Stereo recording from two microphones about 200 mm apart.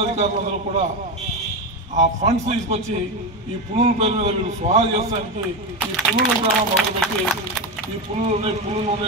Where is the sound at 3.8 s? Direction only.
30° right (ahead or behind).